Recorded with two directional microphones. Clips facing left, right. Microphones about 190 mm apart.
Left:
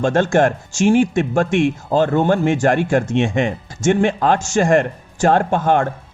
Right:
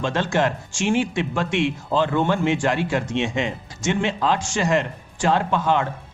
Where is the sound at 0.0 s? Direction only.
50° left (ahead or behind).